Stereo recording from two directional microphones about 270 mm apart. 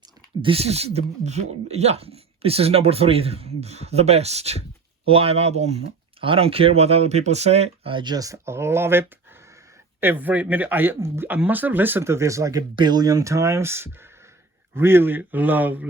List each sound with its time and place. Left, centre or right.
0.4 s speech: right